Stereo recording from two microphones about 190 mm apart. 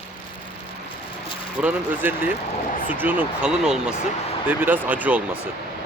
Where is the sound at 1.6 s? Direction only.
5° right (ahead or behind).